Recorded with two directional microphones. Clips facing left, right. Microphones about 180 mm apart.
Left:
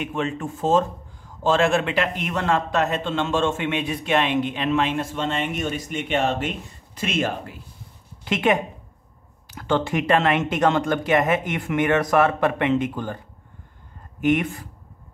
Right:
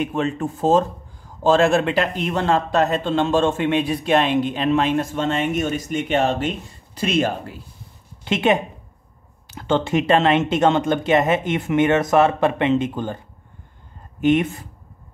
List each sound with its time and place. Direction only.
0.0 s a woman's voice: 40° right (ahead or behind)
14.2 s speech: 25° right (ahead or behind)